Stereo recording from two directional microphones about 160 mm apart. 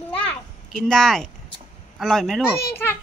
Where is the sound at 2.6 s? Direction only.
15° left (ahead or behind).